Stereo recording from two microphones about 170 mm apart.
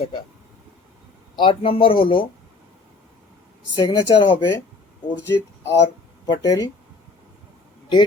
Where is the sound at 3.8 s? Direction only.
25° left (ahead or behind).